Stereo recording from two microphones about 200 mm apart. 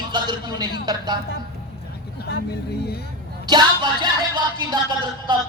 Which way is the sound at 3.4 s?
20° right (ahead or behind).